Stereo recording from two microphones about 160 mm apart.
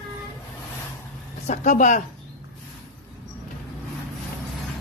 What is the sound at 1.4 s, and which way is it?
Speech, 50° left (ahead or behind).